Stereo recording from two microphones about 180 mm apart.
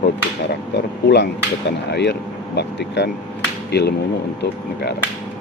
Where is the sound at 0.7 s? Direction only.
70° left (ahead or behind).